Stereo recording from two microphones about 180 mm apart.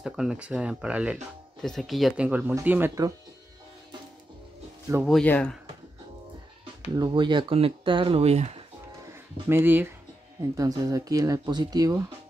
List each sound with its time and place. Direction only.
0.0 s speech: 5° right (ahead or behind)
5.0 s speech: 5° left (ahead or behind)
7.0 s speech: 25° right (ahead or behind)
9.0 s speech: 15° right (ahead or behind)